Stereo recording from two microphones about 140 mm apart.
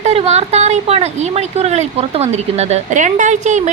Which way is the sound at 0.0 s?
50° right (ahead or behind).